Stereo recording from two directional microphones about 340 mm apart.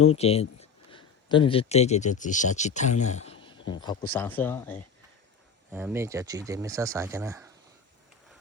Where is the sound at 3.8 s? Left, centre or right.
Centre.